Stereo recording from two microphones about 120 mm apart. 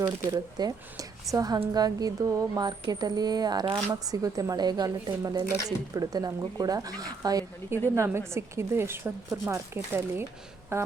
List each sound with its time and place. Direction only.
0.3 s speech: 30° right (ahead or behind)